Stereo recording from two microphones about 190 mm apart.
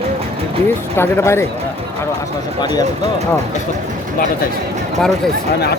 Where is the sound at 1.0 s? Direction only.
15° left (ahead or behind).